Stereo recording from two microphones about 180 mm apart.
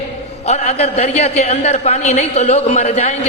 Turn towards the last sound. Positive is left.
turn(degrees=35)  # may be behind; listen again after turning